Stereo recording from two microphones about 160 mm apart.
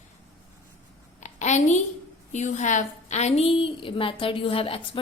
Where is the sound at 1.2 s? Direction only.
45° left (ahead or behind).